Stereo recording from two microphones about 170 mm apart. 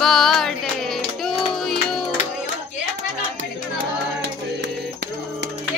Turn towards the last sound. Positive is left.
turn(degrees=-90)